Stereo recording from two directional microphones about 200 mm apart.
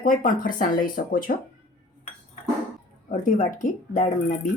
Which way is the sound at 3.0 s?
40° left (ahead or behind).